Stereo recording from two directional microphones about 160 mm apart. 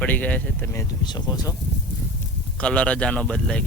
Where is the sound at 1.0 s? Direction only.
25° left (ahead or behind).